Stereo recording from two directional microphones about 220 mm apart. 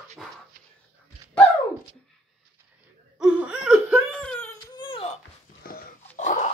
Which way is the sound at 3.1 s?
5° right (ahead or behind).